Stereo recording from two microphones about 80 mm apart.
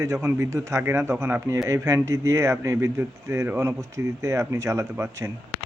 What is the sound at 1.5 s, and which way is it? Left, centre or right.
Speech, right.